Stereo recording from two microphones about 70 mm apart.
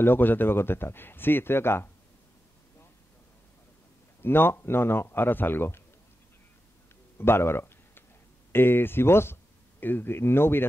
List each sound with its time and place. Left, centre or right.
0.0 s speech: left
4.2 s speech: left
7.2 s a sound: left
8.5 s speech: left